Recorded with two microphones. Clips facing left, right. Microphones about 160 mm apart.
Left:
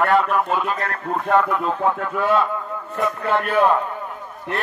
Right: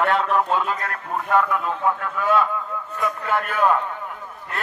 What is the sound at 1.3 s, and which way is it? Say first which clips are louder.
Speech: left 1 dB; 25° left (ahead or behind).